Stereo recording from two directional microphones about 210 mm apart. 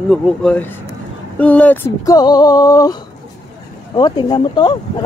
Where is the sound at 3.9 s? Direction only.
20° left (ahead or behind).